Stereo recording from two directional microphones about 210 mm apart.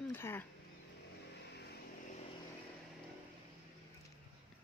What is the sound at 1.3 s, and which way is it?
Vehicle, 50° left (ahead or behind).